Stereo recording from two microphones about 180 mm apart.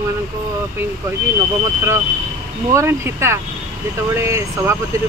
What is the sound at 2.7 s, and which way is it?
Speech, 15° right (ahead or behind).